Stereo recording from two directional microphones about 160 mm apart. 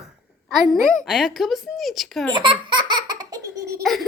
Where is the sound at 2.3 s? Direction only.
30° right (ahead or behind).